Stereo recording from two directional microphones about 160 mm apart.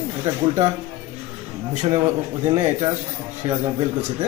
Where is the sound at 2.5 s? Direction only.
40° right (ahead or behind).